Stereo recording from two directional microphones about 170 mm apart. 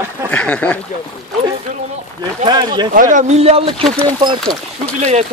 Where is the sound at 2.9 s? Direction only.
50° right (ahead or behind).